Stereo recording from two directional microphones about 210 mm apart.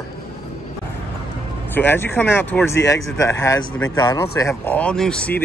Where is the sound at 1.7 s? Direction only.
10° left (ahead or behind).